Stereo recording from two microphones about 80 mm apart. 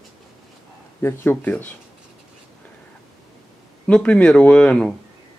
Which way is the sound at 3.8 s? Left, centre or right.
Centre.